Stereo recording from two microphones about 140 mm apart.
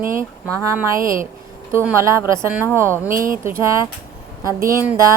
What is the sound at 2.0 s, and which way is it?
Speech, 20° right (ahead or behind).